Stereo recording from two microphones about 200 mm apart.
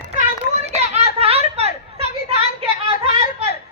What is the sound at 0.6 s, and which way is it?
Children playing, 35° right (ahead or behind).